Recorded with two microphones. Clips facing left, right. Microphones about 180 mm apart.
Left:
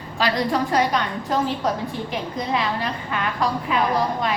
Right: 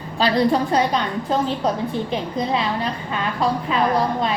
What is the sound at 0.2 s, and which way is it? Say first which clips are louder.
Speech: right 4 dB; 30° right (ahead or behind).